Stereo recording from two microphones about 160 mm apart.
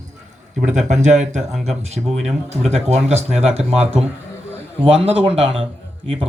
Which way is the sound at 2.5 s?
40° right (ahead or behind).